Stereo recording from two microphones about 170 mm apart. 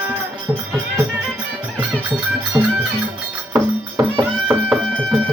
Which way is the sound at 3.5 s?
10° right (ahead or behind).